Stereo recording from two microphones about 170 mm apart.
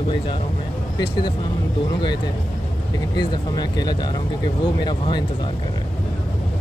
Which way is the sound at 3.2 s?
25° left (ahead or behind).